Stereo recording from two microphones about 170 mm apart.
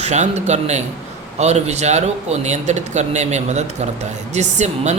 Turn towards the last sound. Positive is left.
turn(degrees=-40)  # may be behind; listen again after turning